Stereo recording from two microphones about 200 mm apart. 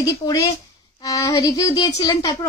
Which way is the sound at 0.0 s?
15° left (ahead or behind).